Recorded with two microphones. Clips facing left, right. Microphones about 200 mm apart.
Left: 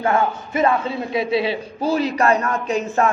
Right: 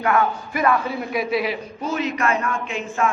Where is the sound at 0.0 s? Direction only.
25° left (ahead or behind).